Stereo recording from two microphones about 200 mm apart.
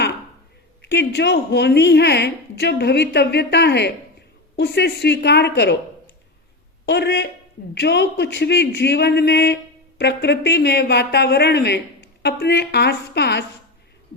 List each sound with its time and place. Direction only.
0.8 s a woman's voice: 60° left (ahead or behind)
6.8 s a woman's voice: 55° left (ahead or behind)